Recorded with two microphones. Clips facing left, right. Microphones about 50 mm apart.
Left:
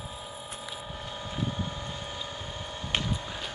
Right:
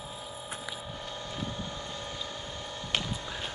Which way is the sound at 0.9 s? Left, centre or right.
Centre.